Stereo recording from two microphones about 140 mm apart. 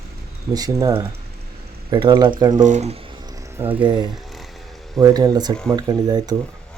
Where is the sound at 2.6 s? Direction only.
60° right (ahead or behind).